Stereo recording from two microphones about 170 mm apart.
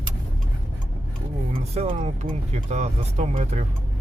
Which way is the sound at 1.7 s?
35° right (ahead or behind).